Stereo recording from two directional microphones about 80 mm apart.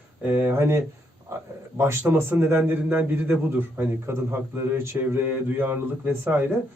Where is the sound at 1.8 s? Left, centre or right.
Right.